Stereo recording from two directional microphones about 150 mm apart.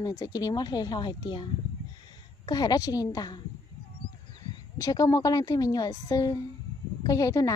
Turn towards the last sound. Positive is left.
turn(degrees=20)  # may be behind; listen again after turning